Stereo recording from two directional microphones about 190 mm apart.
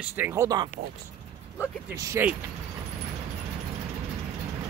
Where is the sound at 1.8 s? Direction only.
15° right (ahead or behind).